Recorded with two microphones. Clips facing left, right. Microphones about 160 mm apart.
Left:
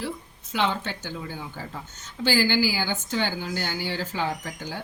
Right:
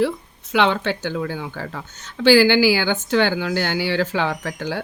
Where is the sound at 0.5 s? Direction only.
80° right.